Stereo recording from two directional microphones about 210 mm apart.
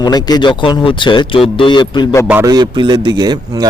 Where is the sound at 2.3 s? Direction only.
15° right (ahead or behind).